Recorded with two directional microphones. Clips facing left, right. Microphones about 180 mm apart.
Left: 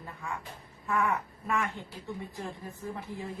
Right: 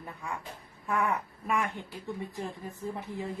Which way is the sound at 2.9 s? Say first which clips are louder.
Right 2 dB; 20° right (ahead or behind).